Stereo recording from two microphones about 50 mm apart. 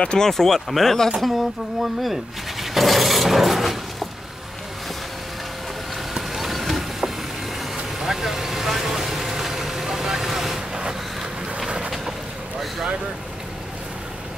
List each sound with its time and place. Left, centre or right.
0.0 s speech: centre
0.3 s speech: centre
2.6 s a sound: centre
6.1 s a sound: centre
8.0 s vehicle: centre
11.6 s boat: centre